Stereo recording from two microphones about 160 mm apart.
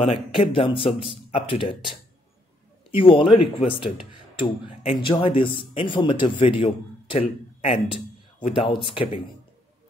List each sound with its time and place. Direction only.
0.0 s speech: 35° left (ahead or behind)
2.9 s speech: 35° left (ahead or behind)